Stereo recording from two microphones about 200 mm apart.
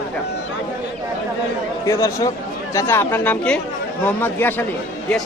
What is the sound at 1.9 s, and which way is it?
Speech, 15° left (ahead or behind).